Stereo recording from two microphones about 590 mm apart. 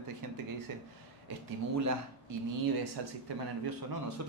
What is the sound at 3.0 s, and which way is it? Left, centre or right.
Speech, right.